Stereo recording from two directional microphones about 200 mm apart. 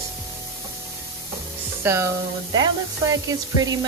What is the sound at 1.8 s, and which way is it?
Speech, 15° right (ahead or behind).